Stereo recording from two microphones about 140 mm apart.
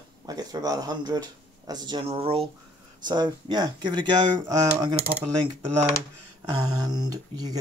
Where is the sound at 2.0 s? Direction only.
45° right (ahead or behind).